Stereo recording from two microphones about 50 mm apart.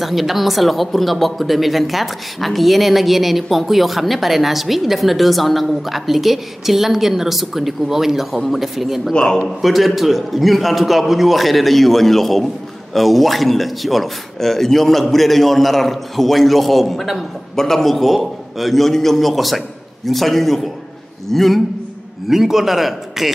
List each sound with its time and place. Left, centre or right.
0.0 s speech: centre
9.1 s a man's voice: centre
9.6 s speech: centre